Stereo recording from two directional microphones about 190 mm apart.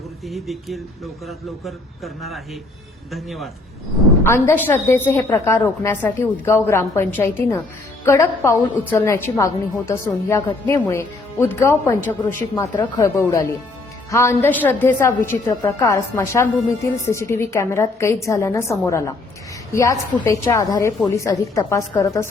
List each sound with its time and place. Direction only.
0.3 s speech: centre (ahead or behind)
4.2 s a woman's voice: 10° left (ahead or behind)